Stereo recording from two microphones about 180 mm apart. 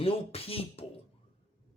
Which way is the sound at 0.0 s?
30° left (ahead or behind).